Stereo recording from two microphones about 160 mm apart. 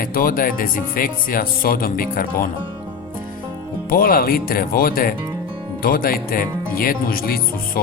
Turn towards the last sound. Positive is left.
turn(degrees=70)  # may be behind; listen again after turning